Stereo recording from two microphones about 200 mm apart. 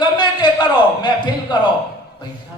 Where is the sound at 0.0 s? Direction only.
20° left (ahead or behind).